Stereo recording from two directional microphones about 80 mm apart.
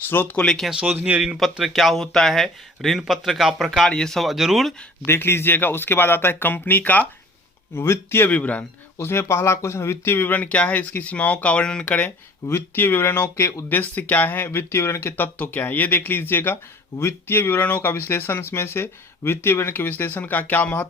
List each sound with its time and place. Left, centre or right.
0.3 s speech: centre
0.9 s speech: right
1.4 s speech: centre
5.0 s speech: left
8.3 s speech: centre
9.0 s speech: left
12.5 s speech: left
13.7 s speech: left